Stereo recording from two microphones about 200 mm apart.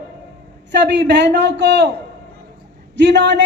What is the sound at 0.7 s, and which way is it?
A man's voice, 60° right (ahead or behind).